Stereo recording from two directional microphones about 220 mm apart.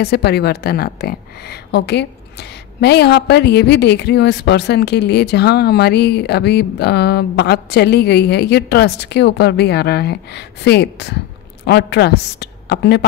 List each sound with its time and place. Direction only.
0.0 s a woman's voice: 50° left (ahead or behind)